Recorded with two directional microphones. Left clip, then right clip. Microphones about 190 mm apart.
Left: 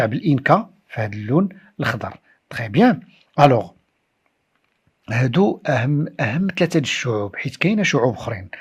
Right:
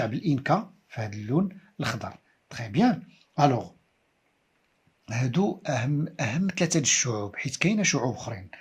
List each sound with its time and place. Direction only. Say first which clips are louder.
0.0 s speech: left 9 dB; 35° left (ahead or behind)
5.0 s speech: left 10 dB; 40° left (ahead or behind)